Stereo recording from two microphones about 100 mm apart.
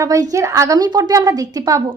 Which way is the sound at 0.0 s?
35° right (ahead or behind).